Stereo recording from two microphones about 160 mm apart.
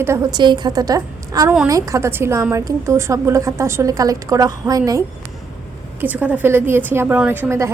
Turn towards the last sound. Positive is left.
turn(degrees=-15)  # may be behind; listen again after turning